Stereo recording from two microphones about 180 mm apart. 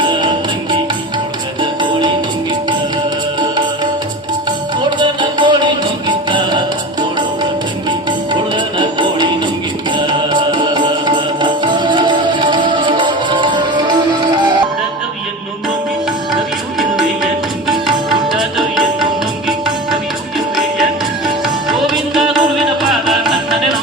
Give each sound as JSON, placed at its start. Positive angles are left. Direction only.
{"t": 4.9, "sound": "music", "side_deg": -25}
{"t": 8.5, "sound": "music", "side_deg": -25}
{"t": 18.3, "sound": "music", "side_deg": 0}
{"t": 21.4, "sound": "music", "side_deg": 0}